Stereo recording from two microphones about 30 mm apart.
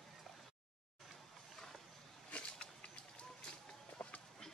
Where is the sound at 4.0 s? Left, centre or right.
Left.